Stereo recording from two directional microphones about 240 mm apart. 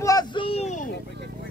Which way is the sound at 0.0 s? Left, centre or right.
Centre.